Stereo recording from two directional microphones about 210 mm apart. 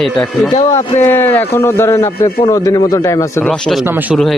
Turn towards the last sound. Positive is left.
turn(degrees=-10)  # may be behind; listen again after turning